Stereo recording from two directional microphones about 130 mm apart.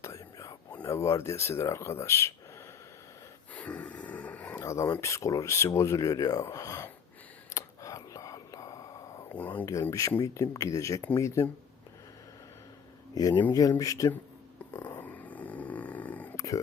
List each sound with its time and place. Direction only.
0.0 s whispering: 25° left (ahead or behind)
0.9 s speech: 20° left (ahead or behind)
3.5 s a sound: 10° left (ahead or behind)
4.6 s speech: 25° left (ahead or behind)
7.5 s whispering: 25° left (ahead or behind)
9.3 s speech: 10° left (ahead or behind)
9.9 s speech: 25° left (ahead or behind)
13.1 s speech: 30° left (ahead or behind)
14.7 s snoring: 15° left (ahead or behind)